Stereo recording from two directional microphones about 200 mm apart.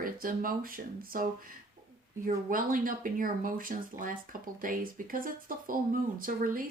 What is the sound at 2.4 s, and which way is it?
Speech, 45° right (ahead or behind).